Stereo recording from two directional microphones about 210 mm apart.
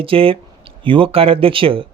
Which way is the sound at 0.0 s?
25° right (ahead or behind).